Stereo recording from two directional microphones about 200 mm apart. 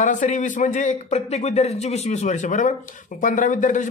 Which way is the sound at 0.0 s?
40° left (ahead or behind).